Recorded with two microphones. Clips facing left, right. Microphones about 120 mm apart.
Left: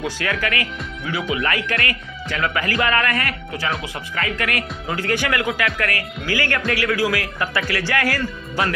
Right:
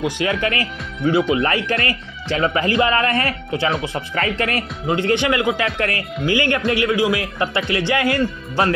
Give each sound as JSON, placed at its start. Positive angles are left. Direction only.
{"t": 0.0, "sound": "speech", "side_deg": -20}